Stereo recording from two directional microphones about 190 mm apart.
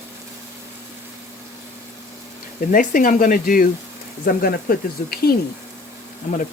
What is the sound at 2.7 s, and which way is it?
Speech, 45° left (ahead or behind).